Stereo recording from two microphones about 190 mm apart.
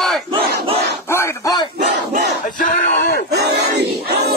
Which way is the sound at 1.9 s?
60° right (ahead or behind).